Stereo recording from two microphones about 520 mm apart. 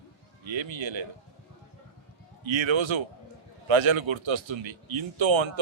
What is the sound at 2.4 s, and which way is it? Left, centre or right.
A man's voice, right.